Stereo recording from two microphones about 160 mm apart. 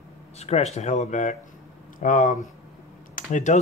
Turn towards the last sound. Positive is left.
turn(degrees=50)  # may be behind; listen again after turning